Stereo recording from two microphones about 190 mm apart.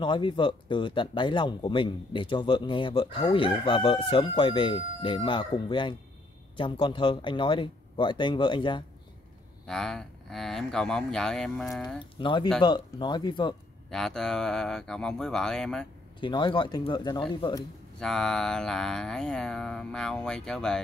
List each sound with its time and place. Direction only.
0.0 s speech: 25° left (ahead or behind)
9.7 s speech: 5° left (ahead or behind)
12.0 s speech: 25° left (ahead or behind)
13.8 s speech: 5° left (ahead or behind)
16.2 s speech: 25° left (ahead or behind)
17.9 s speech: 5° left (ahead or behind)